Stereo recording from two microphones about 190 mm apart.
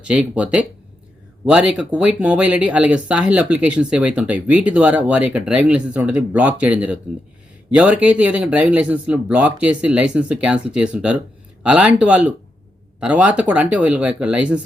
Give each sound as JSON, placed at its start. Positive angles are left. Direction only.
{"t": 0.0, "sound": "speech", "side_deg": -5}